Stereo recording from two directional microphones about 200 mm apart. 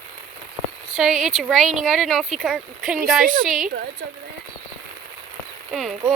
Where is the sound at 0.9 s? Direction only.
Centre (ahead or behind).